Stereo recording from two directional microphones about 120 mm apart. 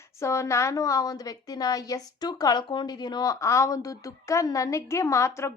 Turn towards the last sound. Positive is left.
turn(degrees=25)  # may be behind; listen again after turning